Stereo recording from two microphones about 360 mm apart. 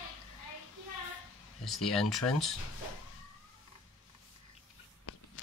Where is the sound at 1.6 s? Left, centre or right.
Centre.